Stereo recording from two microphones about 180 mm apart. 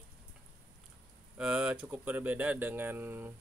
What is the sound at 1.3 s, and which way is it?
Speech, 5° right (ahead or behind).